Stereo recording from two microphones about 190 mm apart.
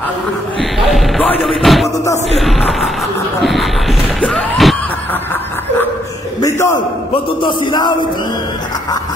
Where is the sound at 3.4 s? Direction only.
Centre (ahead or behind).